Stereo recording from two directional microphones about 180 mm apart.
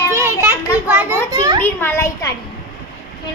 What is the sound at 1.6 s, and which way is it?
Speech, 15° left (ahead or behind).